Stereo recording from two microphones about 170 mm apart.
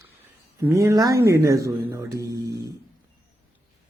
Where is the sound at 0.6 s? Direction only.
15° right (ahead or behind).